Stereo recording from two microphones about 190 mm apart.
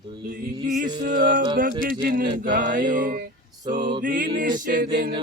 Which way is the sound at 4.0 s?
45° right (ahead or behind).